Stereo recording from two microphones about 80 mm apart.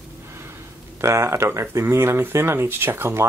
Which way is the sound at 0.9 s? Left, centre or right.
Right.